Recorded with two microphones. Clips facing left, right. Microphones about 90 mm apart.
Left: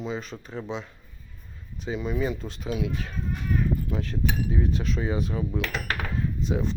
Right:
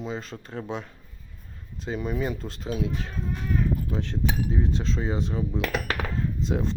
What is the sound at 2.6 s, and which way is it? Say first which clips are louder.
Speech: even; 30° right (ahead or behind).